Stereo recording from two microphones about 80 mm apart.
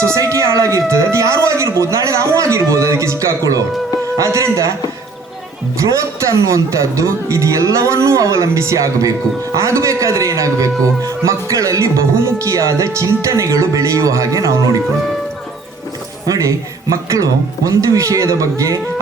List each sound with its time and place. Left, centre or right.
0.0 s a sound: right
5.8 s a man's voice: right
16.2 s a man's voice: right